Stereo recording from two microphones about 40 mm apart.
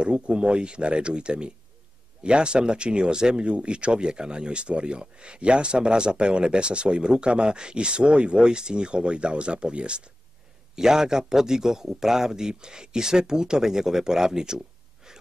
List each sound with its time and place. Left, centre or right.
0.0 s speech: right
10.8 s a man's voice: centre